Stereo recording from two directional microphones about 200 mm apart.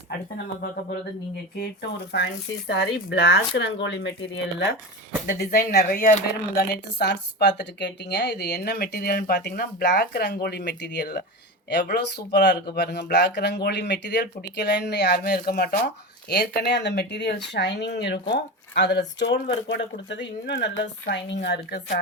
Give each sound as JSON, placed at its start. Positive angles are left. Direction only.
{"t": 1.8, "sound": "speech", "side_deg": 60}